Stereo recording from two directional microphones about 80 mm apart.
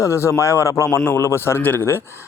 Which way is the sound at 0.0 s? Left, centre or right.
Left.